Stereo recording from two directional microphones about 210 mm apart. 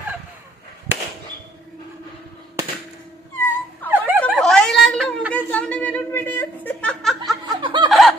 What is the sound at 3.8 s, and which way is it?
Dog, 10° right (ahead or behind).